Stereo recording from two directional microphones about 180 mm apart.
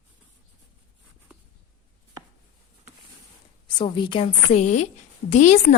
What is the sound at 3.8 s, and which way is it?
A woman's voice, 25° left (ahead or behind).